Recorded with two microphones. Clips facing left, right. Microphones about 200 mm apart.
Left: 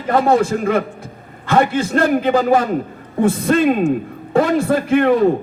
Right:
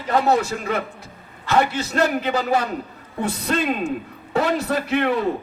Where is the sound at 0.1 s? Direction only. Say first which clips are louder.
Left 5 dB; 50° left (ahead or behind).